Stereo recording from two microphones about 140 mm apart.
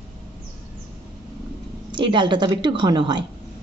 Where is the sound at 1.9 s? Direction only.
35° right (ahead or behind).